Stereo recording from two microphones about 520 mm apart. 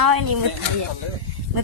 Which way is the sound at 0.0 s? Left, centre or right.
Right.